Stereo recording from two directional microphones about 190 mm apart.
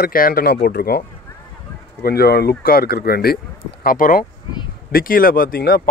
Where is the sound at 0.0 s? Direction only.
50° left (ahead or behind).